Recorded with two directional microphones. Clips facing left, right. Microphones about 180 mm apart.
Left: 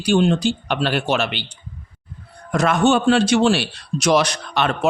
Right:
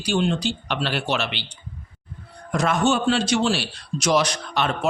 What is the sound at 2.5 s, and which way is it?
A man's voice, 65° left (ahead or behind).